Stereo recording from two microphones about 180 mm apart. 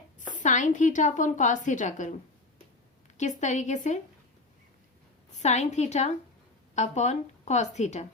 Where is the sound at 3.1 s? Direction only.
40° left (ahead or behind).